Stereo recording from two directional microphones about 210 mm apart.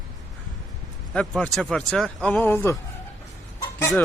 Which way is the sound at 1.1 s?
5° left (ahead or behind).